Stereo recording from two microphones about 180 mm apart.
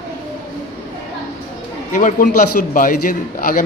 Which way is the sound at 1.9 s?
45° left (ahead or behind).